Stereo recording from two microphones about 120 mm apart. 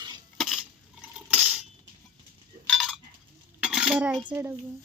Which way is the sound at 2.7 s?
Centre (ahead or behind).